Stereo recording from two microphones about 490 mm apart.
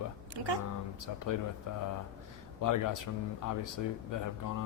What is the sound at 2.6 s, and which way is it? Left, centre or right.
A man's voice, left.